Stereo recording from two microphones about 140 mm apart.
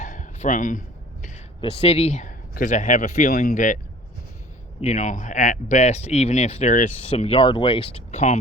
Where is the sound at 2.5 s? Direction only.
70° left (ahead or behind).